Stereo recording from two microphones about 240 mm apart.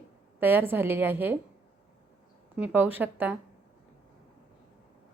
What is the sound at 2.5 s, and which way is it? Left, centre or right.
Speech, centre.